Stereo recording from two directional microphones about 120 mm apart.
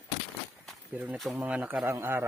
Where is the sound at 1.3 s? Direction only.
15° right (ahead or behind).